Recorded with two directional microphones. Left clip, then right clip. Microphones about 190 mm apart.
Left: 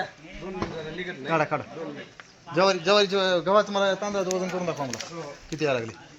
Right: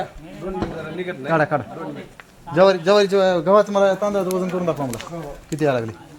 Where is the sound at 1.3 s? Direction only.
55° right (ahead or behind).